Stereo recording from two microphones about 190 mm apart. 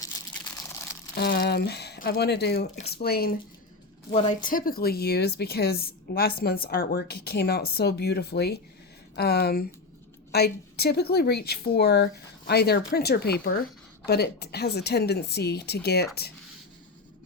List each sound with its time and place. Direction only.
1.1 s speech: 55° left (ahead or behind)
4.1 s speech: 30° left (ahead or behind)
4.4 s speech: 45° left (ahead or behind)